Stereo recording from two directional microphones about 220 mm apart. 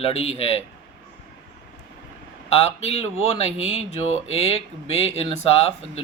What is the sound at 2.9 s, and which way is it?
Speech, 30° left (ahead or behind).